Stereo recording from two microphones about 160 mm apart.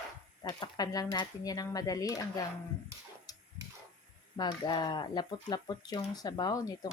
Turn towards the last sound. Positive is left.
turn(degrees=20)  # may be behind; listen again after turning